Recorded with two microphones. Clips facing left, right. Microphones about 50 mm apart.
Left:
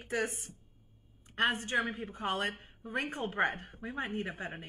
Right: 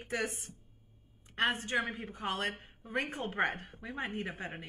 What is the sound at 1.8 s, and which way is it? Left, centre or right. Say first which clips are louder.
Speech: left 2 dB; right.